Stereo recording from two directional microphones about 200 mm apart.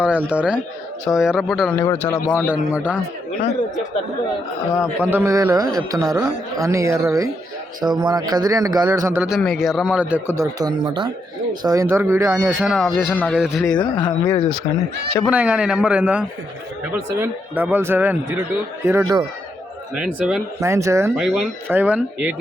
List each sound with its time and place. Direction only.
0.0 s a man's voice: 5° right (ahead or behind)
1.8 s a man's voice: 10° left (ahead or behind)
2.5 s a man's voice: 5° right (ahead or behind)
4.7 s a man's voice: 15° left (ahead or behind)
5.1 s a man's voice: 15° right (ahead or behind)
12.6 s a man's voice: centre (ahead or behind)
13.7 s speech: 20° left (ahead or behind)
15.2 s a man's voice: 5° right (ahead or behind)
20.0 s a man's voice: 5° right (ahead or behind)
20.6 s a man's voice: 15° right (ahead or behind)
21.2 s a man's voice: centre (ahead or behind)